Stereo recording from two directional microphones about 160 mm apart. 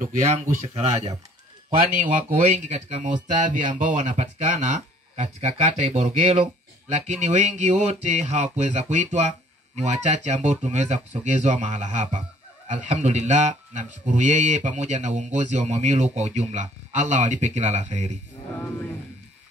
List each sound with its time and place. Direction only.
0.0 s speech: 50° right (ahead or behind)
2.3 s speech: 50° right (ahead or behind)